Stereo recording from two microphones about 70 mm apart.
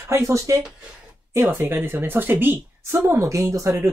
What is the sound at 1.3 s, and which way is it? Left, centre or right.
Speech, right.